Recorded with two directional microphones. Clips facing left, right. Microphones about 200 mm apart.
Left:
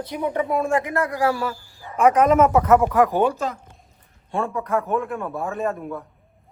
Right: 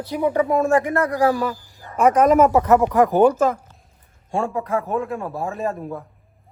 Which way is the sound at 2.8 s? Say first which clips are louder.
Right 1 dB; 20° right (ahead or behind).